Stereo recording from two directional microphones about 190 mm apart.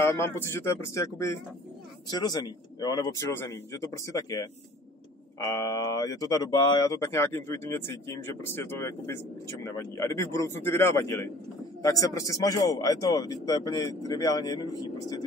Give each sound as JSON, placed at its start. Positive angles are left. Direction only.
{"t": 0.0, "sound": "speech", "side_deg": 10}